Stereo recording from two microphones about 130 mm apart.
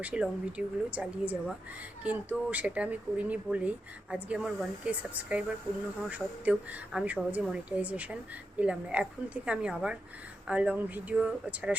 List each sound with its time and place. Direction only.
0.0 s speech: 10° right (ahead or behind)